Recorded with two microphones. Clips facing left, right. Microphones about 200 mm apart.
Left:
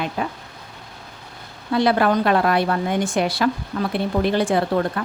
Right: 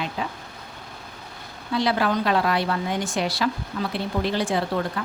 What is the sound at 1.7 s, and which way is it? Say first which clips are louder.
A woman's voice: left 5 dB; 55° left (ahead or behind).